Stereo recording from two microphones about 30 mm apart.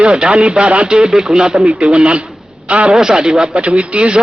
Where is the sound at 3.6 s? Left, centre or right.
Right.